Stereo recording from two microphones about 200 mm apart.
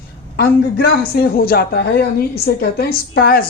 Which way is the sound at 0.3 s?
50° left (ahead or behind).